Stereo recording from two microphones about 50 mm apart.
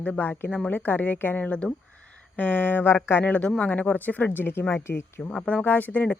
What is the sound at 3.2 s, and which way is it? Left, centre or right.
Speech, left.